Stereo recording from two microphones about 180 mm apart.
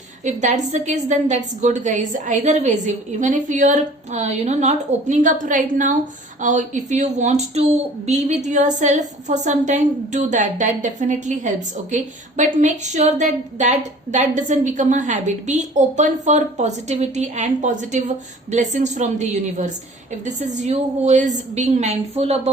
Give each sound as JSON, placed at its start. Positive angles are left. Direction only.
{"t": 0.3, "sound": "a woman's voice", "side_deg": -40}